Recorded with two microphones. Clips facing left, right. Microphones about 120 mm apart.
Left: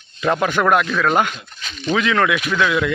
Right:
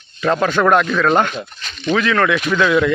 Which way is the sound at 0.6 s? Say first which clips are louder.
Right 3 dB; centre (ahead or behind).